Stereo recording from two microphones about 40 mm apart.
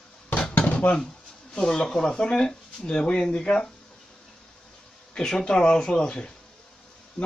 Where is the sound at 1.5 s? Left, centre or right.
Left.